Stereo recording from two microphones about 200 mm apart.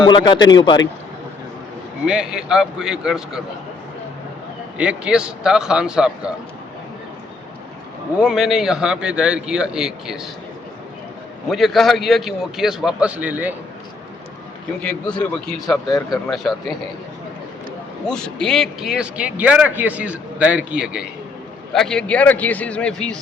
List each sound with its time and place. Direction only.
0.0 s a man's voice: 25° left (ahead or behind)
2.0 s a man's voice: 5° right (ahead or behind)
4.8 s a man's voice: 5° right (ahead or behind)
8.2 s a man's voice: centre (ahead or behind)
11.4 s a man's voice: centre (ahead or behind)
15.2 s a man's voice: 5° left (ahead or behind)
15.9 s speech: 15° left (ahead or behind)
16.3 s a man's voice: centre (ahead or behind)
18.0 s a man's voice: 5° left (ahead or behind)